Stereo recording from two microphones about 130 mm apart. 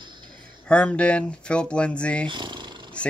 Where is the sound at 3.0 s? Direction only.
10° left (ahead or behind).